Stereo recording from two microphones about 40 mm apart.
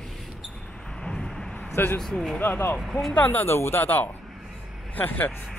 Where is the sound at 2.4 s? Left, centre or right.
Left.